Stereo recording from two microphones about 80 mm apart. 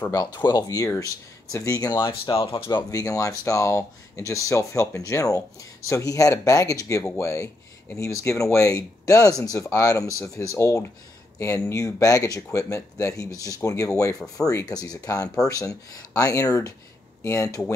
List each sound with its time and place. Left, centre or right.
0.1 s speech: left
2.0 s speech: left
2.9 s speech: left